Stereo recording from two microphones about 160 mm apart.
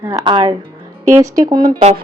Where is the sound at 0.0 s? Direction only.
15° right (ahead or behind).